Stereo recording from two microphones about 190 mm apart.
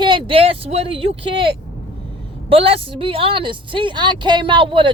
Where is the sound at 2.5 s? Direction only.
30° right (ahead or behind).